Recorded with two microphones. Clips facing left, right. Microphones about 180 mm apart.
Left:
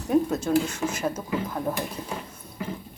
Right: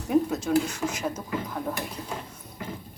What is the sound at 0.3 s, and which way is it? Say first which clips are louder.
Speech: left 1 dB; centre (ahead or behind).